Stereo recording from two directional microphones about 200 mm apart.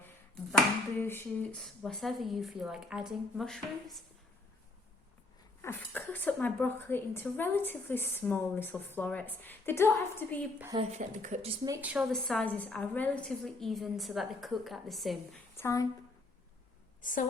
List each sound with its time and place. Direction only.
0.5 s a woman's voice: 10° left (ahead or behind)
5.6 s speech: 10° left (ahead or behind)
10.8 s speech: 35° right (ahead or behind)
11.6 s a woman's voice: 10° right (ahead or behind)
15.5 s speech: 15° left (ahead or behind)
17.0 s a woman's voice: 40° left (ahead or behind)